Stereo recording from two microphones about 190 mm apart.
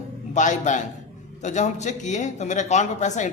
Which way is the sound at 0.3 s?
40° left (ahead or behind).